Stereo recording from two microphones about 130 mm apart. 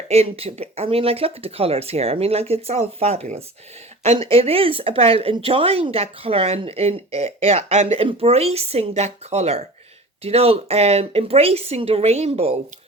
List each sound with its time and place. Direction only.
0.1 s speech: 50° right (ahead or behind)